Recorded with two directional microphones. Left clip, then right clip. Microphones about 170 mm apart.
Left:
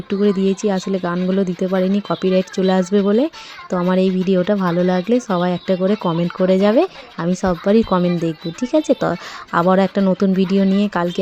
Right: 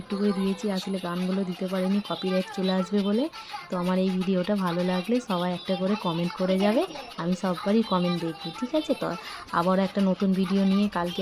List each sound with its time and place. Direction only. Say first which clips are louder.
0.3 s speech: left 11 dB; 50° left (ahead or behind)